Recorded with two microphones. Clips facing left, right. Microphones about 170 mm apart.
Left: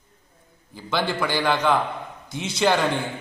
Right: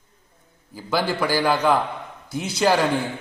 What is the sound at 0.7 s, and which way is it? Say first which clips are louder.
A man's voice: right 2 dB; 5° right (ahead or behind).